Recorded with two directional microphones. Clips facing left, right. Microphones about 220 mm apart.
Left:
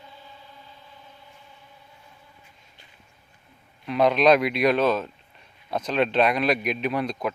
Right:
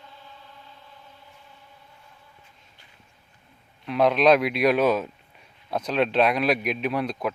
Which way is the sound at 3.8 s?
Centre (ahead or behind).